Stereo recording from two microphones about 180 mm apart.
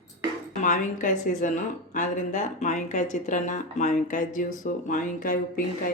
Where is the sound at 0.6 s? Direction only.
45° left (ahead or behind).